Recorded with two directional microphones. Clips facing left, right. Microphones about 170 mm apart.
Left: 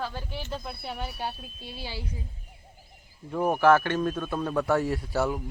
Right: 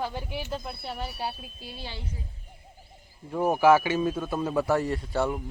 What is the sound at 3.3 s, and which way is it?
Speech, 5° right (ahead or behind).